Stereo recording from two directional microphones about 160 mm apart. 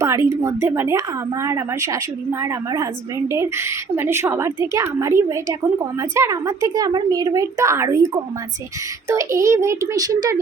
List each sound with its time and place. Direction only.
0.0 s a woman's voice: 20° right (ahead or behind)